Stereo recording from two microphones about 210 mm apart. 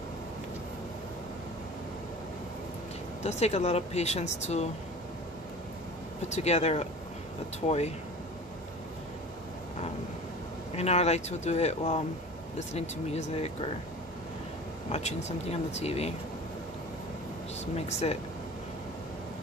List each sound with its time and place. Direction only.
3.3 s speech: 30° left (ahead or behind)
6.2 s speech: 30° left (ahead or behind)
10.8 s speech: 30° left (ahead or behind)
14.9 s speech: 30° left (ahead or behind)
17.7 s speech: 30° left (ahead or behind)